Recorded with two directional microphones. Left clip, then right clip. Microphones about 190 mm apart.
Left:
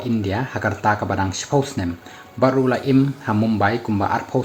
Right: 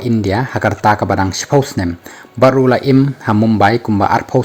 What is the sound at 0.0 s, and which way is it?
Speech, 45° right (ahead or behind).